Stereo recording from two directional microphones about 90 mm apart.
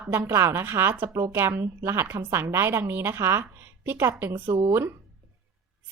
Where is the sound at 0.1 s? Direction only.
25° right (ahead or behind).